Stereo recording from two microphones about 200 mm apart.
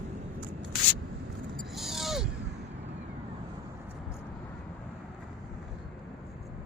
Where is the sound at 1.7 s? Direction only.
Centre (ahead or behind).